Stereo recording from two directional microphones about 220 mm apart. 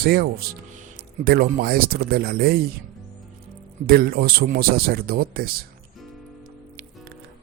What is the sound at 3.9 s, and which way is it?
Speech, 45° right (ahead or behind).